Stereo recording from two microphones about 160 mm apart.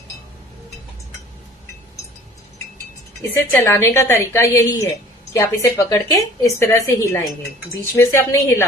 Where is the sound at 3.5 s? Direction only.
15° left (ahead or behind).